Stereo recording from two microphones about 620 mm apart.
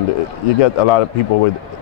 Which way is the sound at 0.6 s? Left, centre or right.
Left.